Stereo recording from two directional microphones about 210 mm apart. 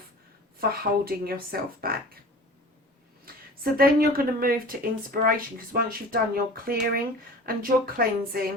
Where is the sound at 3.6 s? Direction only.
45° right (ahead or behind).